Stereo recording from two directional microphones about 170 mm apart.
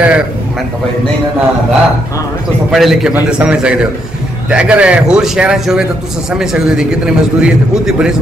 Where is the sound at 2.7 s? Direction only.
Centre (ahead or behind).